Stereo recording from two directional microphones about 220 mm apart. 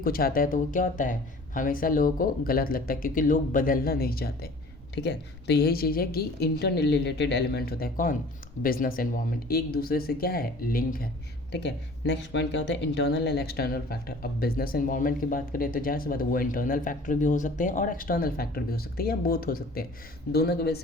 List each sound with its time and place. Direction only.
0.0 s a woman's voice: 40° left (ahead or behind)
11.5 s a woman's voice: 50° left (ahead or behind)